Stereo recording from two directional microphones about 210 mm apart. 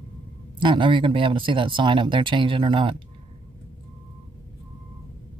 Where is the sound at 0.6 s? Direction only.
25° right (ahead or behind).